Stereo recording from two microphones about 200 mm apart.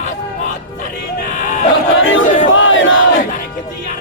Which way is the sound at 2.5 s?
75° left (ahead or behind).